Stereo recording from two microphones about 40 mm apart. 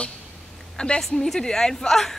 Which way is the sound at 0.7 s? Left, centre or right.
Left.